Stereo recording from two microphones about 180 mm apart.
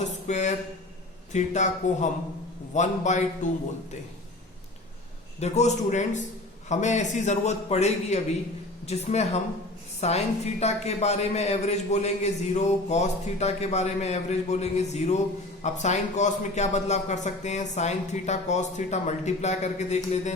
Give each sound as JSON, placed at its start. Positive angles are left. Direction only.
{"t": 0.0, "sound": "a sound", "side_deg": 40}
{"t": 1.3, "sound": "a woman's voice", "side_deg": 40}
{"t": 5.4, "sound": "a woman's voice", "side_deg": 40}